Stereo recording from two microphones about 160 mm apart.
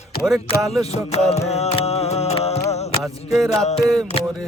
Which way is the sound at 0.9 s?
40° left (ahead or behind).